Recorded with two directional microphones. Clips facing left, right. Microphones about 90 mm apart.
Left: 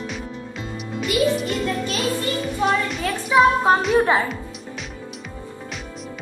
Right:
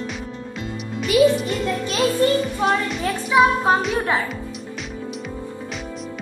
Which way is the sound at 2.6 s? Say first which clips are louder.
Right 1 dB; centre (ahead or behind).